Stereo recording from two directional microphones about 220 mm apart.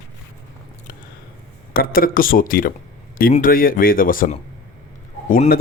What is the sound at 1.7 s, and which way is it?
Speech, 40° left (ahead or behind).